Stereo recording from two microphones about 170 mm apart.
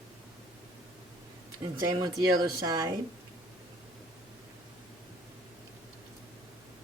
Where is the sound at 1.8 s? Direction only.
20° right (ahead or behind).